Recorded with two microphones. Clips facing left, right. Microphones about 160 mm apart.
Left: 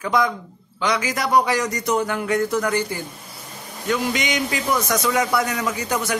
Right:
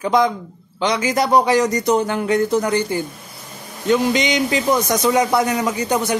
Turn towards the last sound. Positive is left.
turn(degrees=-25)  # may be behind; listen again after turning